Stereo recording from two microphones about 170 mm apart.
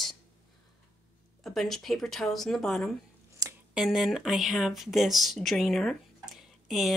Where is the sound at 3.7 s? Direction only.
5° right (ahead or behind).